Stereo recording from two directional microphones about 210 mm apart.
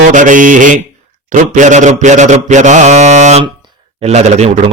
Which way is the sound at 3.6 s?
30° right (ahead or behind).